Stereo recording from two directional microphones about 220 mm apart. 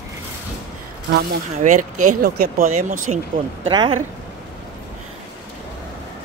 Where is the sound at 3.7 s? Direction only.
20° right (ahead or behind).